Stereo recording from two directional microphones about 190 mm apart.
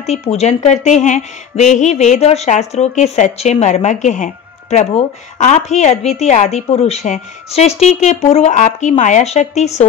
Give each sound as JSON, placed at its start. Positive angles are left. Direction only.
{"t": 0.0, "sound": "speech", "side_deg": 35}